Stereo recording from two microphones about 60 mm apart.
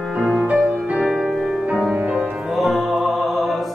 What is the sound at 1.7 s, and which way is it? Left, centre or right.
Music, centre.